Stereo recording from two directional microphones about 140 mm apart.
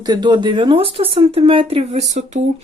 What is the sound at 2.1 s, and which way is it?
Speech, 55° right (ahead or behind).